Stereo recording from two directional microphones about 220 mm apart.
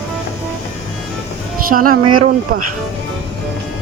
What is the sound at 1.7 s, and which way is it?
Speech, 40° right (ahead or behind).